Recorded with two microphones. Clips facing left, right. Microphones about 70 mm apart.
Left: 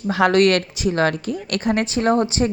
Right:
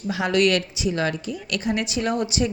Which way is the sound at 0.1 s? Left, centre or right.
Left.